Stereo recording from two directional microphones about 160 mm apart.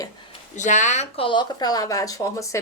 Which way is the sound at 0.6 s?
50° left (ahead or behind).